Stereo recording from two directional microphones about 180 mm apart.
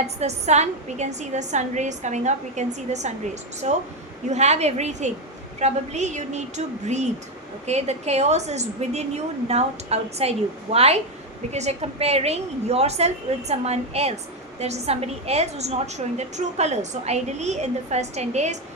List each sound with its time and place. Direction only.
0.2 s a woman's voice: 35° right (ahead or behind)